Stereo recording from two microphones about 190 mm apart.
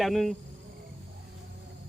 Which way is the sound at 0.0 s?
Centre (ahead or behind).